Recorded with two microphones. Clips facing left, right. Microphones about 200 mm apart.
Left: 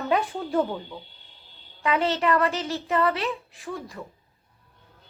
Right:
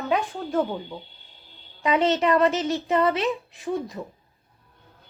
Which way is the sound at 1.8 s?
20° right (ahead or behind).